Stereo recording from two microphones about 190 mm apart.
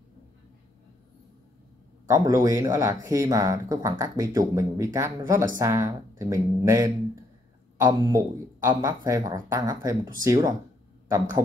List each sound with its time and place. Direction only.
2.0 s speech: 20° right (ahead or behind)